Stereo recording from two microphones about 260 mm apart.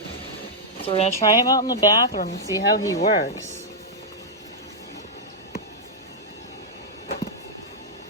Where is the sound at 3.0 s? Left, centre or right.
Left.